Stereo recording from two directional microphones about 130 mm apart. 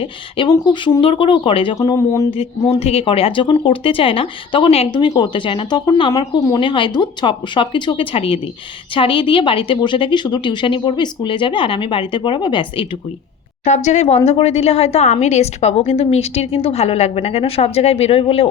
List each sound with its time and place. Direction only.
0.0 s a woman's voice: 40° left (ahead or behind)
1.8 s speech: 25° left (ahead or behind)
2.6 s a woman's voice: 50° left (ahead or behind)
13.7 s a woman's voice: 65° left (ahead or behind)